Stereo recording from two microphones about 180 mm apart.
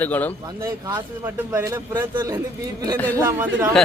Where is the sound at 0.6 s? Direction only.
20° right (ahead or behind).